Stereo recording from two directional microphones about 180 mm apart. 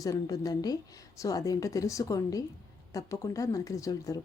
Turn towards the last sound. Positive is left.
turn(degrees=20)  # may be behind; listen again after turning